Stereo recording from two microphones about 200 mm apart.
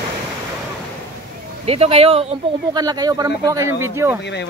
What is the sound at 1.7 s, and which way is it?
Speech, 30° right (ahead or behind).